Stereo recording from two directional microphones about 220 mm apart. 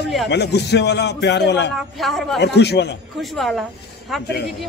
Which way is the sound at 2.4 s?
50° left (ahead or behind).